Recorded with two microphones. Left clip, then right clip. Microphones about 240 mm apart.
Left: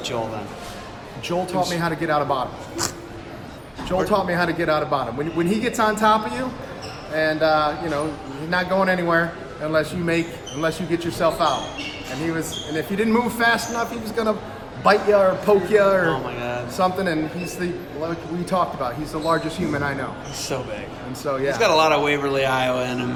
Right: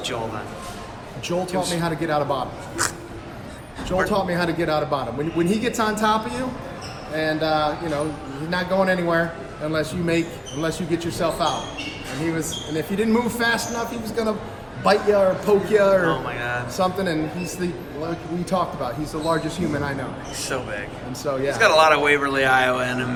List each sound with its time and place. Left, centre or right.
1.3 s a man's voice: centre
14.8 s a man's voice: centre
21.2 s a man's voice: centre
21.6 s a man's voice: centre